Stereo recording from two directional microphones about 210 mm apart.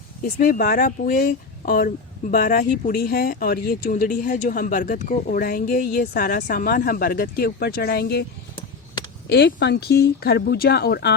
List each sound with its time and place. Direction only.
0.2 s speech: 40° left (ahead or behind)
9.2 s speech: 55° left (ahead or behind)